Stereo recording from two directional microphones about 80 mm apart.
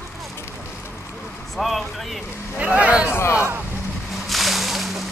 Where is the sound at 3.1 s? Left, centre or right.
Left.